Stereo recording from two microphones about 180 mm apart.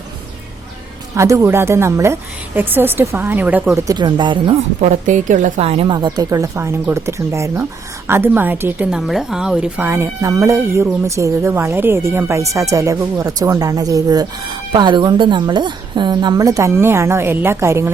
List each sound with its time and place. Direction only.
1.1 s a woman's voice: 15° right (ahead or behind)
3.9 s speech: 25° right (ahead or behind)
4.8 s a woman's voice: 45° right (ahead or behind); by 17.9 s 15° right (ahead or behind)